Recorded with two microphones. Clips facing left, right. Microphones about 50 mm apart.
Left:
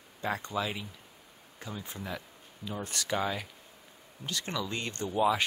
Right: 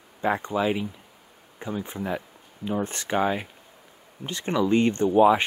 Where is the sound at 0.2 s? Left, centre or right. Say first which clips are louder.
Right 8 dB; right.